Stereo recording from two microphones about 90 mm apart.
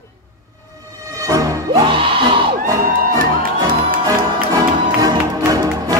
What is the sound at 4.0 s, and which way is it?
Music, 45° right (ahead or behind).